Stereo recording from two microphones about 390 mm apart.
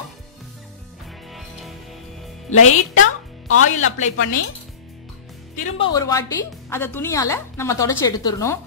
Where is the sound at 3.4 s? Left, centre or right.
Left.